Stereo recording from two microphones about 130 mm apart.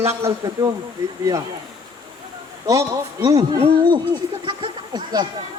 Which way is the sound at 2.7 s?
25° right (ahead or behind).